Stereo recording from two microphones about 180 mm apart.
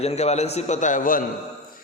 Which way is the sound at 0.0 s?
35° left (ahead or behind).